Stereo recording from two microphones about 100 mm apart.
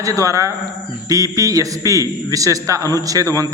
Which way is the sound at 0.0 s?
35° right (ahead or behind).